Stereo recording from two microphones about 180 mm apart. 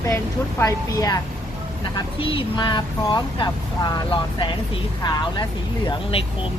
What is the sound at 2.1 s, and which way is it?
Speech, 30° left (ahead or behind).